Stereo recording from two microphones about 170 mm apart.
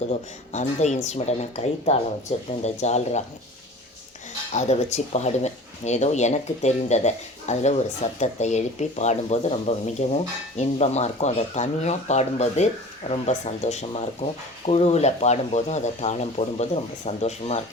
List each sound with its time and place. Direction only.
0.1 s speech: 45° left (ahead or behind)
4.5 s speech: 40° left (ahead or behind)